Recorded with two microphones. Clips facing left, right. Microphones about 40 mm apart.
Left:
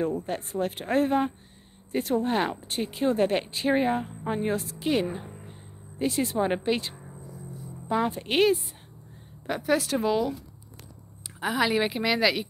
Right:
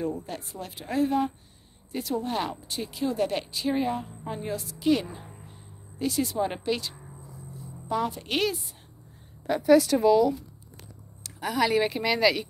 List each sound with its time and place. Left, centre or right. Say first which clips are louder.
0.0 s speech: left 3 dB; left
5.2 s music: left 4 dB; centre
5.9 s a woman's voice: left 1 dB; left
7.2 s music: left 3 dB; centre
7.9 s a woman's voice: left 2 dB; left
11.3 s speech: left 1 dB; left
11.6 s speech: right 1 dB; centre